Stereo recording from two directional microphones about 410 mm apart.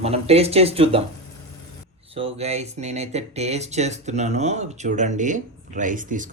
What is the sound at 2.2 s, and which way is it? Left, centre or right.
Speech, centre.